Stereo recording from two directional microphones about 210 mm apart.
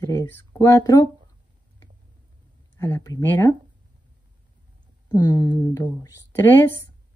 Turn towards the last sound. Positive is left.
turn(degrees=10)  # may be behind; listen again after turning